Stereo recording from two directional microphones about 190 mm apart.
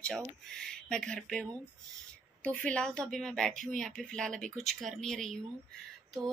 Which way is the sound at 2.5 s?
5° left (ahead or behind).